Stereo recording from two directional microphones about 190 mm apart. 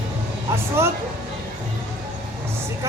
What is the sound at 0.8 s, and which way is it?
Speech, 10° right (ahead or behind).